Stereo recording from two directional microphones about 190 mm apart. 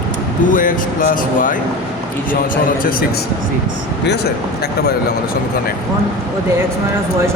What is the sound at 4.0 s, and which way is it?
Speech, 60° left (ahead or behind).